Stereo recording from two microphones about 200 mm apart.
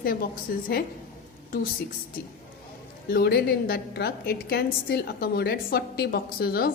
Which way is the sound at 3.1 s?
50° left (ahead or behind).